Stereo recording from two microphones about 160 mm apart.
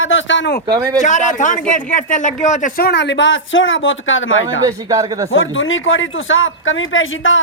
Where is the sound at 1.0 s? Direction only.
50° left (ahead or behind); by 3.2 s 90° left.